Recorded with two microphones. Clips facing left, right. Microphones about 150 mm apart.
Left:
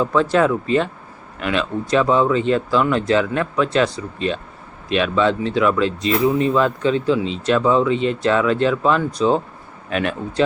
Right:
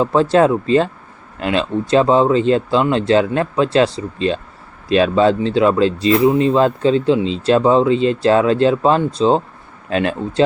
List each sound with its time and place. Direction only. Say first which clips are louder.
0.0 s speech: right 4 dB; 30° right (ahead or behind)